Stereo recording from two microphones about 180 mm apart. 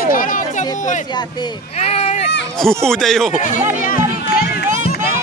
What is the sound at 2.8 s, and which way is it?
Speech, centre (ahead or behind).